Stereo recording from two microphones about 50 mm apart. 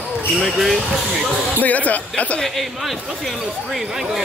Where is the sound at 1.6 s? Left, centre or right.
Left.